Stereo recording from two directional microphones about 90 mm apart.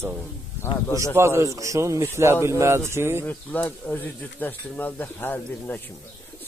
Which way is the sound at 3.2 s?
20° left (ahead or behind).